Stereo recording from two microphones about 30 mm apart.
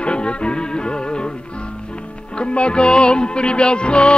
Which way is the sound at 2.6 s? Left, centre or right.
Left.